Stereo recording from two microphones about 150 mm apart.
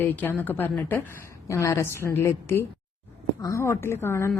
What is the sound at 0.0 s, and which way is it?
A woman's voice, 15° left (ahead or behind).